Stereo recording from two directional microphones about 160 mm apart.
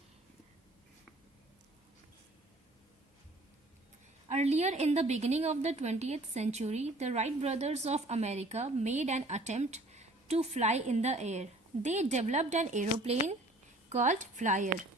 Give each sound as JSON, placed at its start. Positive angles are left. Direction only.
{"t": 4.3, "sound": "a woman's voice", "side_deg": -45}